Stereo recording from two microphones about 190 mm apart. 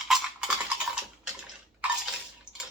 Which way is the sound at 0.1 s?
5° right (ahead or behind).